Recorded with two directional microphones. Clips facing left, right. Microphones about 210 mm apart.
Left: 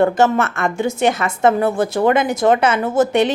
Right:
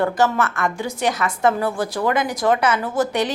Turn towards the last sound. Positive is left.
turn(degrees=25)  # may be behind; listen again after turning